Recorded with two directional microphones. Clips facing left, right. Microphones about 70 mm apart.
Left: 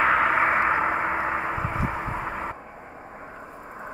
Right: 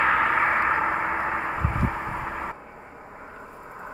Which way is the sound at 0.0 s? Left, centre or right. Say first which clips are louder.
Left 1 dB; centre.